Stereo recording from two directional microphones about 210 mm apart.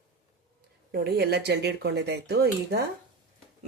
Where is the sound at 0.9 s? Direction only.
50° right (ahead or behind).